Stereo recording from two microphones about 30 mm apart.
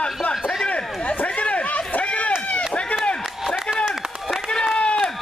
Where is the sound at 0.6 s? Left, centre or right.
Left.